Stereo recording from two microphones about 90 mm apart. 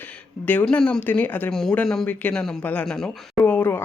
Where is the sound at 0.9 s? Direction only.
15° left (ahead or behind).